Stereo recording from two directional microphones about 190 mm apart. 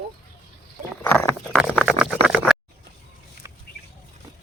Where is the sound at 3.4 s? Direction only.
15° right (ahead or behind).